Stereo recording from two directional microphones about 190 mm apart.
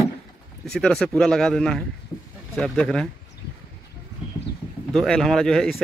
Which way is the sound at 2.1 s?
5° left (ahead or behind).